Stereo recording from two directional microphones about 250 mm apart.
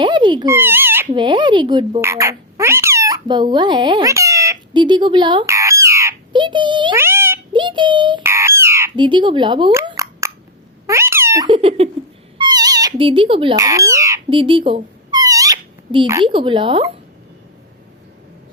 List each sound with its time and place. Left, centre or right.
0.0 s speech: centre
2.0 s cat: centre
12.4 s a sound: centre